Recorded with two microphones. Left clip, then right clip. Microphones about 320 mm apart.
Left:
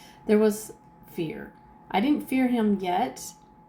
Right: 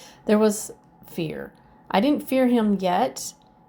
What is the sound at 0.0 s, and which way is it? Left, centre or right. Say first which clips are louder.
A woman's voice: right 2 dB; right.